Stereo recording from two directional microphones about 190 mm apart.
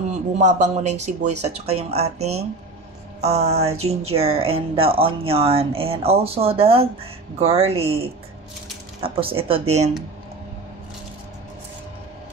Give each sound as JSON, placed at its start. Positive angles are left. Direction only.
{"t": 0.4, "sound": "speech", "side_deg": -40}